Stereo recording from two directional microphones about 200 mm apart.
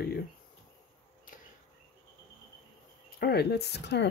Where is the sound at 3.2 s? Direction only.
55° left (ahead or behind).